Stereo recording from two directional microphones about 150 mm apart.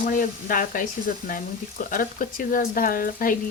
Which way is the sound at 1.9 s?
65° left (ahead or behind).